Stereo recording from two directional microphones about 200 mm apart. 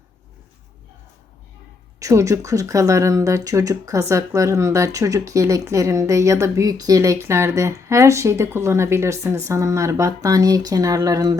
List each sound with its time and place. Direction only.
2.0 s speech: 15° right (ahead or behind)